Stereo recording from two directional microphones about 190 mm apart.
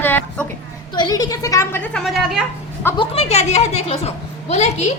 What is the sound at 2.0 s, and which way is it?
Speech, centre (ahead or behind).